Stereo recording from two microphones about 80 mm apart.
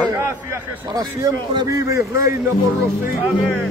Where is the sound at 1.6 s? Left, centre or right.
Right.